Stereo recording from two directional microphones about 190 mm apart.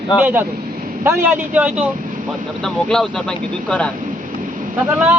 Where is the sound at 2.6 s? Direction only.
Centre (ahead or behind).